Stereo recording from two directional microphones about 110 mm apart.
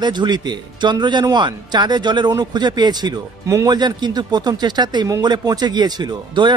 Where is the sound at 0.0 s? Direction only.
40° right (ahead or behind).